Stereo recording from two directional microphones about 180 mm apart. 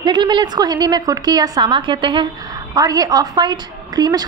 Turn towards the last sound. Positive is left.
turn(degrees=-20)  # may be behind; listen again after turning